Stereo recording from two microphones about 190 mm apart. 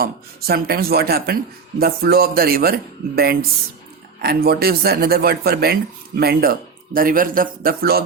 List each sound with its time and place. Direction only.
0.0 s speech: 55° right (ahead or behind)